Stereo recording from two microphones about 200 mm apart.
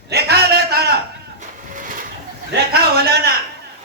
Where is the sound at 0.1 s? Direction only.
55° right (ahead or behind).